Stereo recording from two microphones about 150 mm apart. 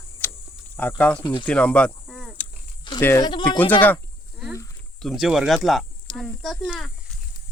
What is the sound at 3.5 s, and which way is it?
Speech, 10° left (ahead or behind).